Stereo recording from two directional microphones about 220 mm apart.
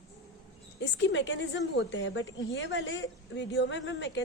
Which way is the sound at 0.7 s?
55° left (ahead or behind).